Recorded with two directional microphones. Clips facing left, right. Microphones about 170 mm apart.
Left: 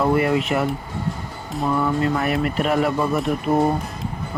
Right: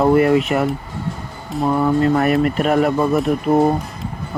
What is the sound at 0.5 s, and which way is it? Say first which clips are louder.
Speech: right 3 dB; 55° right (ahead or behind).